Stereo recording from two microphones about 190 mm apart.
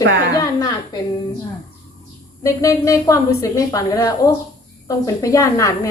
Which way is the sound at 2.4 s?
15° left (ahead or behind).